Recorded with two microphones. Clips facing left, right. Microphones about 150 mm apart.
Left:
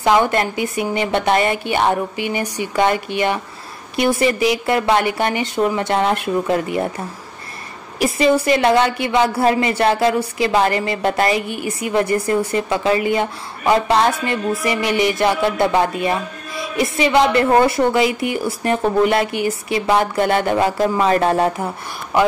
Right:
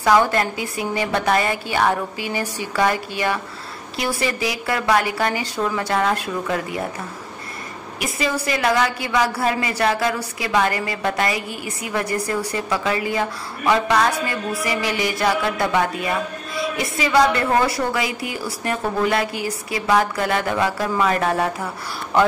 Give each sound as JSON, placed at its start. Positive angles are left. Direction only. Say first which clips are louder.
{"t": 0.0, "sound": "a woman's voice", "louder": "left 1 dB", "side_deg": 20}
{"t": 8.0, "sound": "a woman's voice", "louder": "left 9 dB", "side_deg": 25}